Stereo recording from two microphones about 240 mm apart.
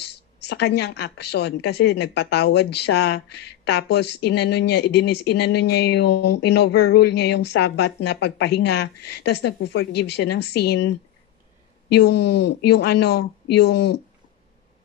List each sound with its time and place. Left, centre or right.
0.4 s a woman's voice: left
11.9 s a woman's voice: left